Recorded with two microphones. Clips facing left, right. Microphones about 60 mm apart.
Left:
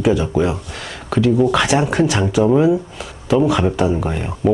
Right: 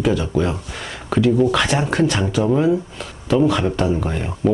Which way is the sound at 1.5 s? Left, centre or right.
Centre.